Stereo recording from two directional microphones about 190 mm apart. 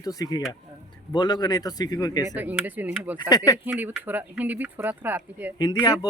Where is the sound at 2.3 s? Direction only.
10° right (ahead or behind).